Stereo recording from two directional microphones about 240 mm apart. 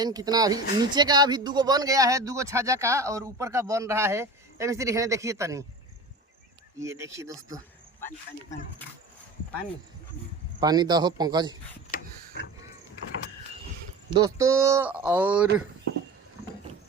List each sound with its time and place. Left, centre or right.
0.0 s speech: centre
6.7 s speech: centre
10.6 s speech: centre
14.1 s speech: centre